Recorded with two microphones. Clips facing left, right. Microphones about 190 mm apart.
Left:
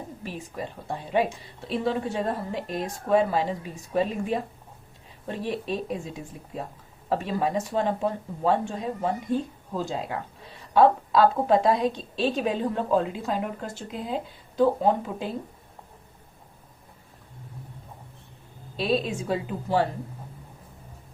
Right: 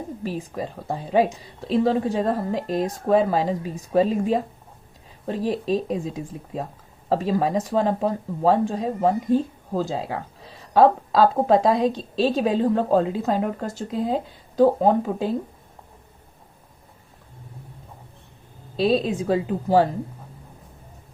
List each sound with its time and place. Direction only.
0.5 s a woman's voice: 40° right (ahead or behind)
7.1 s a woman's voice: 40° right (ahead or behind)
18.8 s a woman's voice: 35° right (ahead or behind)